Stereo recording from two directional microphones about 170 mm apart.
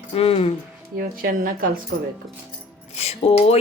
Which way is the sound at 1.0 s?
55° right (ahead or behind).